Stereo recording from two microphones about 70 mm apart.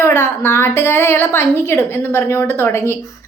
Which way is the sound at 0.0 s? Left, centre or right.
Left.